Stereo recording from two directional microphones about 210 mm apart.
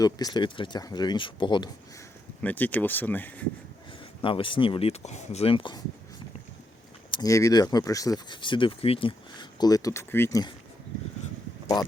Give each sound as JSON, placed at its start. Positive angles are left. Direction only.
{"t": 0.0, "sound": "speech", "side_deg": 20}
{"t": 2.4, "sound": "speech", "side_deg": 10}
{"t": 4.2, "sound": "speech", "side_deg": 25}
{"t": 7.1, "sound": "speech", "side_deg": 15}